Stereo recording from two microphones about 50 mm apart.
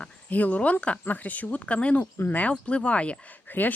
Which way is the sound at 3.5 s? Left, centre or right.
Left.